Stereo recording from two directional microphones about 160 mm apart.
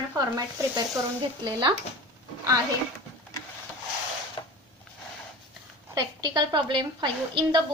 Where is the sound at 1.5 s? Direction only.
25° right (ahead or behind).